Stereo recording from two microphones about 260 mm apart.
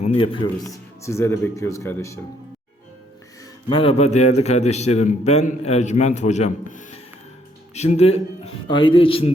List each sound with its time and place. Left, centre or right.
0.0 s a man's voice: left
0.7 s speech: centre
3.7 s a man's voice: left